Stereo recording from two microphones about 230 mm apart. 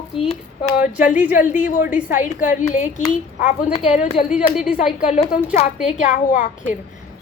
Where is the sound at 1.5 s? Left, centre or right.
Left.